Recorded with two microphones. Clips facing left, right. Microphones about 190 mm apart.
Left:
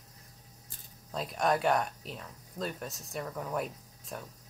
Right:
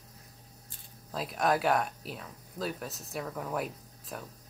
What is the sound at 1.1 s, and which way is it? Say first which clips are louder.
Speech: right 1 dB; centre (ahead or behind).